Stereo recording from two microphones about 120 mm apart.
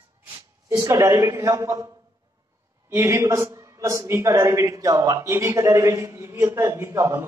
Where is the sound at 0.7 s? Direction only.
25° right (ahead or behind).